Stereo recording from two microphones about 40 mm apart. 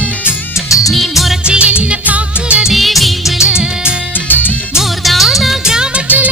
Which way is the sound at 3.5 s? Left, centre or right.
Right.